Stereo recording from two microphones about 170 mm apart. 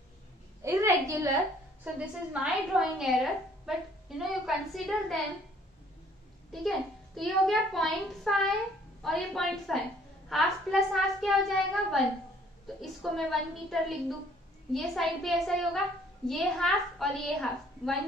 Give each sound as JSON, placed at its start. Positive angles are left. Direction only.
{"t": 0.6, "sound": "a sound", "side_deg": -20}
{"t": 2.0, "sound": "a woman's voice", "side_deg": -5}
{"t": 7.2, "sound": "a woman's voice", "side_deg": 0}